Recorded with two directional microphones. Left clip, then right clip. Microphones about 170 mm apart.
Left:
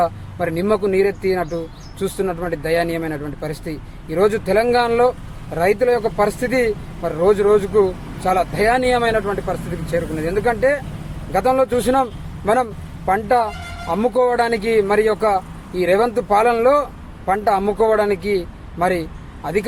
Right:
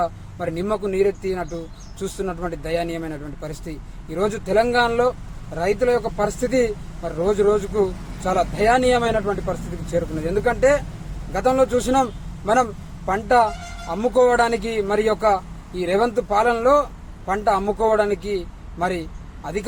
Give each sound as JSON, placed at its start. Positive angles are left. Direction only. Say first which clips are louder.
{"t": 0.0, "sound": "speech", "louder": "left 5 dB", "side_deg": 15}
{"t": 10.2, "sound": "speech", "louder": "even", "side_deg": 15}
{"t": 13.1, "sound": "speech", "louder": "left 1 dB", "side_deg": 15}